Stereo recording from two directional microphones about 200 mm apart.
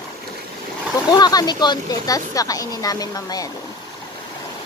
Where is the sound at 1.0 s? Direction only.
20° left (ahead or behind).